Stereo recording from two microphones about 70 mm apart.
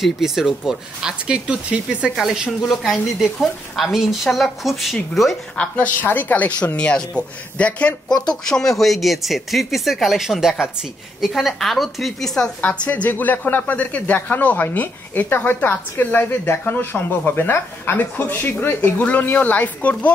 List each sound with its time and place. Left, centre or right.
0.0 s speech: centre
2.1 s speech: centre
5.6 s speech: centre
12.6 s speech: left